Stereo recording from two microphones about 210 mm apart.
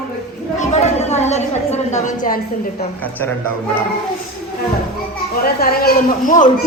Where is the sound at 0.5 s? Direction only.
30° left (ahead or behind).